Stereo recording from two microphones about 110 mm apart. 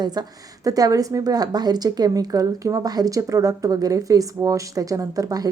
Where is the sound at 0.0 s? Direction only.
35° right (ahead or behind).